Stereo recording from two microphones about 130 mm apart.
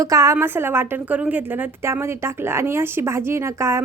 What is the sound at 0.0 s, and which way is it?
Speech, 25° right (ahead or behind).